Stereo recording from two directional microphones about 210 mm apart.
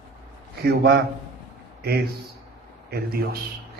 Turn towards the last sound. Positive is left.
turn(degrees=-50)  # may be behind; listen again after turning